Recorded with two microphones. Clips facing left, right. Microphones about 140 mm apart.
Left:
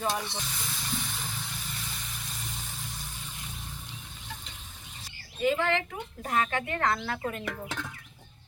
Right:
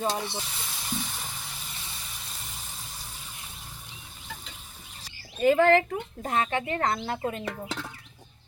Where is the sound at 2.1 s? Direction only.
Centre (ahead or behind).